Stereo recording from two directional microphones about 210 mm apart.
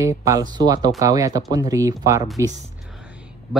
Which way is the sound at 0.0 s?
15° right (ahead or behind).